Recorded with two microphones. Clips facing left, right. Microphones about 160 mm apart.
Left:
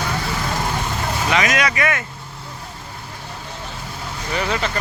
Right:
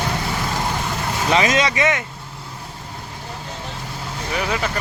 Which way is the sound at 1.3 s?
25° right (ahead or behind).